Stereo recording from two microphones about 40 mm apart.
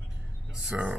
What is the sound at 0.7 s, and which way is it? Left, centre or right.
Speech, right.